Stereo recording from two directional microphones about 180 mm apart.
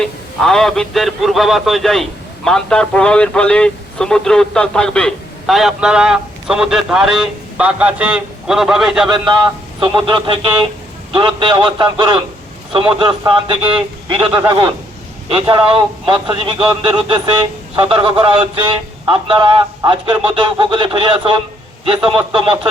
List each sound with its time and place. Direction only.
0.0 s a man's voice: centre (ahead or behind)
9.8 s a man's voice: 25° right (ahead or behind)